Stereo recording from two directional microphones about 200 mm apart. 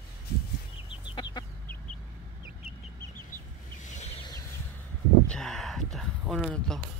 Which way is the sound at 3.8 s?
35° left (ahead or behind).